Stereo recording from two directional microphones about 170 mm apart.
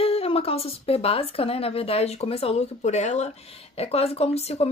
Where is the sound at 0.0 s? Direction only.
35° left (ahead or behind).